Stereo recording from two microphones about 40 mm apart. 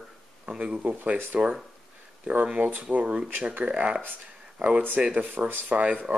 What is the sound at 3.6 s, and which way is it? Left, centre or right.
Speech, right.